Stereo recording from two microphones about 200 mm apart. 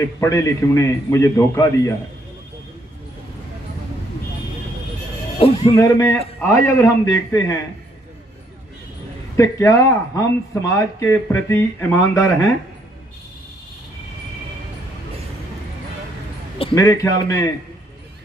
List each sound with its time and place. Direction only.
0.0 s speech: 15° left (ahead or behind)
5.7 s speech: 15° left (ahead or behind)
9.4 s speech: 15° left (ahead or behind)
16.7 s speech: 15° left (ahead or behind)